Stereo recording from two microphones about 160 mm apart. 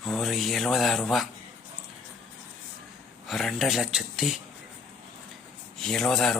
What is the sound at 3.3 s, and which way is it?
Speech, centre (ahead or behind).